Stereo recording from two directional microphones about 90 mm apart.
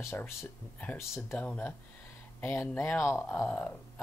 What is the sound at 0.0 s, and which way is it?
Speech, 25° left (ahead or behind).